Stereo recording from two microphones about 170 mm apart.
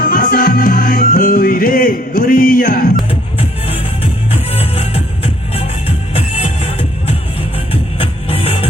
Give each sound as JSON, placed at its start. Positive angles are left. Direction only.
{"t": 0.0, "sound": "music", "side_deg": 55}
{"t": 3.1, "sound": "music", "side_deg": 35}